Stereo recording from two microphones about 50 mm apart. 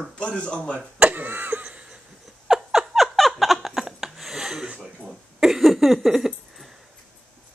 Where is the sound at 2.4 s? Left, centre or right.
Centre.